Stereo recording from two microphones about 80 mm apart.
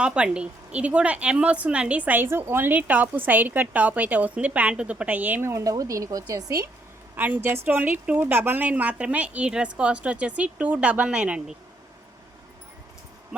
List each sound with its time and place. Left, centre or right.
0.0 s a woman's voice: centre
5.5 s speech: right
7.2 s a woman's voice: right